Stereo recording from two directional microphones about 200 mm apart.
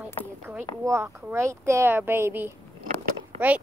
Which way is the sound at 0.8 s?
15° right (ahead or behind).